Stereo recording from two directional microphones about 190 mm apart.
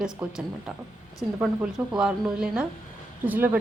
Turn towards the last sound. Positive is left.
turn(degrees=-10)  # may be behind; listen again after turning